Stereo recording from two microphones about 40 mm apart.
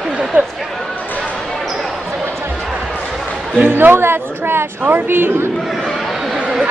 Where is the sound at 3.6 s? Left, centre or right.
Right.